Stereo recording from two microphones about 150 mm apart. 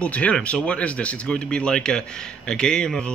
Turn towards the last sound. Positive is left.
turn(degrees=5)  # may be behind; listen again after turning